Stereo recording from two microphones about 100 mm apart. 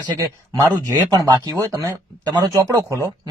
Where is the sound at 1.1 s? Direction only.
45° right (ahead or behind).